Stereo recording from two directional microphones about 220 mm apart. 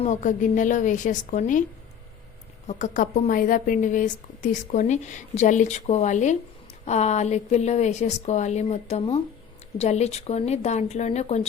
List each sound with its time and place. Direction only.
0.0 s a woman's voice: 35° left (ahead or behind)
2.6 s a woman's voice: 35° left (ahead or behind)